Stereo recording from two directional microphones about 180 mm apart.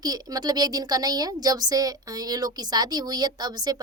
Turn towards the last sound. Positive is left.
turn(degrees=-20)  # may be behind; listen again after turning